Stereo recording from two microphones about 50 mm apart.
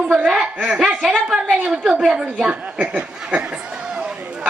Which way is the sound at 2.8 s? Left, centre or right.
Right.